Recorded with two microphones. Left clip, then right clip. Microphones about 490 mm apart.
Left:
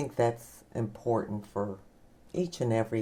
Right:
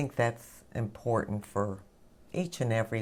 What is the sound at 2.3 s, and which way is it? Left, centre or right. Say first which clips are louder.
Speech: left 2 dB; centre.